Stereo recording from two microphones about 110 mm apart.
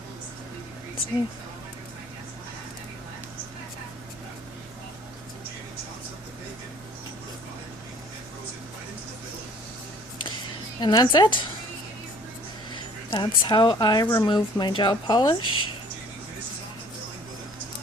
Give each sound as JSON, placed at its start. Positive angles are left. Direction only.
{"t": 10.8, "sound": "a woman's voice", "side_deg": 40}
{"t": 12.7, "sound": "speech", "side_deg": 50}